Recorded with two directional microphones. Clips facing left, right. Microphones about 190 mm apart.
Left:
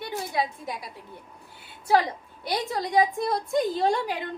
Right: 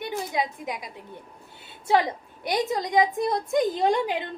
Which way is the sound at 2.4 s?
20° right (ahead or behind).